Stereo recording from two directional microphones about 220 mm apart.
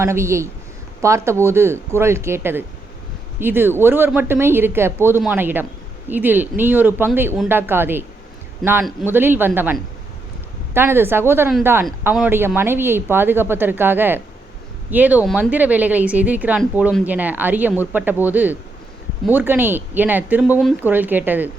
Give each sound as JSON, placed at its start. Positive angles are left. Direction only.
{"t": 0.0, "sound": "speech", "side_deg": -10}
{"t": 10.8, "sound": "speech", "side_deg": -10}